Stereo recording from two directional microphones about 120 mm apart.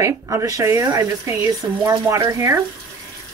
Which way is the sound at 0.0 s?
25° right (ahead or behind).